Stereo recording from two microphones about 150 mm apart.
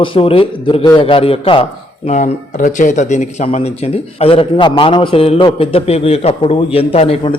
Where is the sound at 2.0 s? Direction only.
55° left (ahead or behind).